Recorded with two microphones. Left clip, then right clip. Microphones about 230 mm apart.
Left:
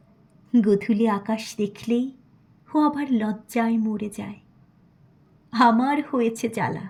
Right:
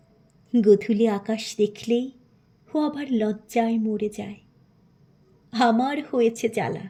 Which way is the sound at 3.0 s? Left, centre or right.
Left.